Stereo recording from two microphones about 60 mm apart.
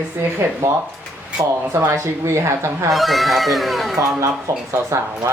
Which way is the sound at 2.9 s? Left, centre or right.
Centre.